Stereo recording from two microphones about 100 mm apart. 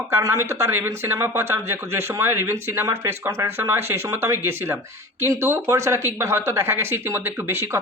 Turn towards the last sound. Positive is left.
turn(degrees=-25)  # may be behind; listen again after turning